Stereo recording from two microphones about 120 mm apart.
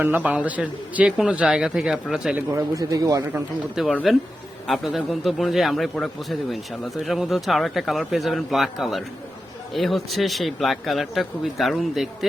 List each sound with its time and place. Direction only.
0.0 s a man's voice: 15° right (ahead or behind)
2.5 s speech: 30° right (ahead or behind)
3.8 s speech: 5° right (ahead or behind)